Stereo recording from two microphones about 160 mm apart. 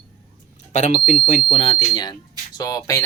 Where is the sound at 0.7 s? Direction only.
45° left (ahead or behind).